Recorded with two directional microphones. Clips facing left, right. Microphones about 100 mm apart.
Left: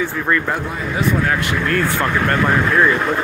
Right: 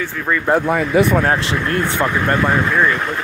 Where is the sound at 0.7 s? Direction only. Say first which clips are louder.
Right 6 dB; 65° right (ahead or behind).